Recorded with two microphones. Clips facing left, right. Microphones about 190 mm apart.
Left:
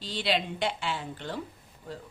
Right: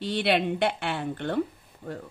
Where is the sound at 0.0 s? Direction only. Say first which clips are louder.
Right 5 dB; 60° right (ahead or behind).